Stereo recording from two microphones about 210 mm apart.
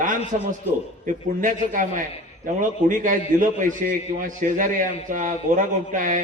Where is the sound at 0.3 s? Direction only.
25° right (ahead or behind).